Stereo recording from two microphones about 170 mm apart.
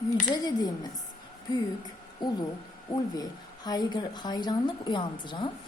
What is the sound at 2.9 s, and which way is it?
A woman's voice, 25° left (ahead or behind).